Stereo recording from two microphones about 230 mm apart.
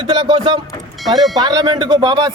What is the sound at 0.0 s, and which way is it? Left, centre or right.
Speech, centre.